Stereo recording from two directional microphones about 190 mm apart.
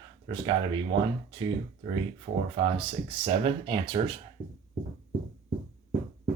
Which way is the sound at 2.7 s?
30° right (ahead or behind).